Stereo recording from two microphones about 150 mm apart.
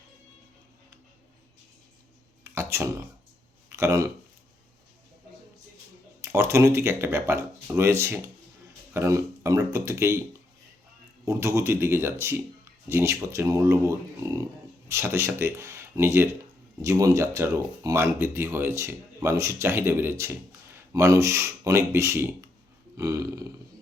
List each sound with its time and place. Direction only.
2.4 s a sound: 15° right (ahead or behind)
6.2 s speech: 15° right (ahead or behind)
11.3 s speech: 20° right (ahead or behind)